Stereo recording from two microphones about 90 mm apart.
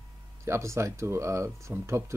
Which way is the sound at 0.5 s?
30° right (ahead or behind).